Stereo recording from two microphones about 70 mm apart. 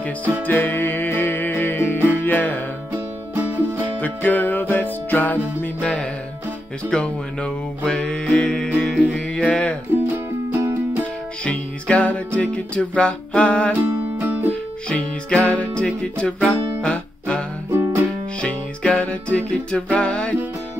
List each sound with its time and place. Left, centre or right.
0.5 s music: left
2.9 s music: right
3.8 s music: left
5.8 s music: centre
11.4 s music: centre
13.7 s music: right
14.9 s music: centre
17.6 s music: right
18.4 s music: centre